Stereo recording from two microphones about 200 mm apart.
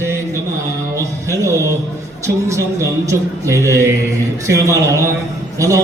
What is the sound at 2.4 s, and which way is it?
A man's voice, 15° right (ahead or behind).